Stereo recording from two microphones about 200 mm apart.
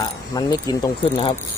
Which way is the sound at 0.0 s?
20° left (ahead or behind).